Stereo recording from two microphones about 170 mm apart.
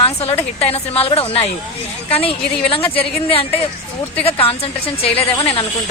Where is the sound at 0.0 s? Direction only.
35° left (ahead or behind).